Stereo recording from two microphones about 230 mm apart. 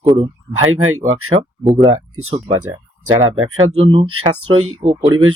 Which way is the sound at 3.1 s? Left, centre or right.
Right.